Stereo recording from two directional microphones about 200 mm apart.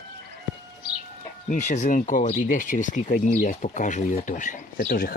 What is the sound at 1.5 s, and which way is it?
Speech, 35° left (ahead or behind).